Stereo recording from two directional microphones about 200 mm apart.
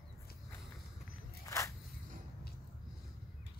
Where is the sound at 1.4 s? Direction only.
15° left (ahead or behind).